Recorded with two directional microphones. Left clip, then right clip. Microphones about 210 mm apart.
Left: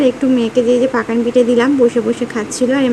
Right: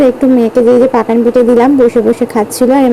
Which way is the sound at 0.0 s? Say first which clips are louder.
Right 6 dB; 15° right (ahead or behind).